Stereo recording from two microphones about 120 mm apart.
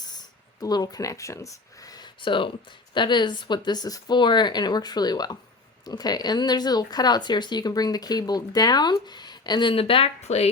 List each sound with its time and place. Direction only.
0.0 s speech: 35° left (ahead or behind); by 10.5 s 60° left (ahead or behind)